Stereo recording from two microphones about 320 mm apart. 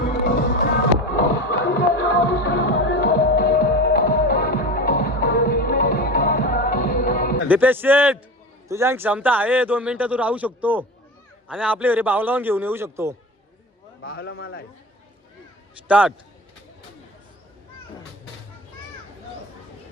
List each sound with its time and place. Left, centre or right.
0.0 s music: left
7.4 s speech: centre
14.0 s a man's voice: left
15.9 s speech: centre